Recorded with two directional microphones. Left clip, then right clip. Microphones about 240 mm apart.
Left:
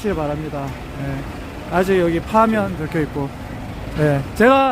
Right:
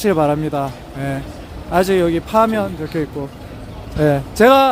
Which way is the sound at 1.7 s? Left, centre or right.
Right.